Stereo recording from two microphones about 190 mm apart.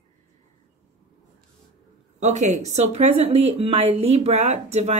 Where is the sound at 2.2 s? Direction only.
35° right (ahead or behind).